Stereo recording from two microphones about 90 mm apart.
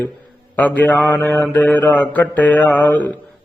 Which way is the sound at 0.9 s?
15° left (ahead or behind).